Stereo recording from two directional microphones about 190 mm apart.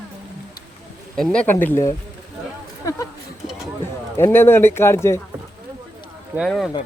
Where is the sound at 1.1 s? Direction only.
5° left (ahead or behind).